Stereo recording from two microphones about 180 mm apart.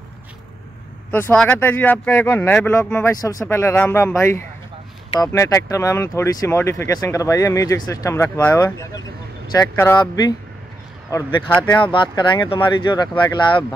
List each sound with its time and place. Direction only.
1.1 s speech: 10° left (ahead or behind)
3.1 s speech: 20° left (ahead or behind)
11.5 s speech: 15° left (ahead or behind)
11.8 s speech: 25° left (ahead or behind)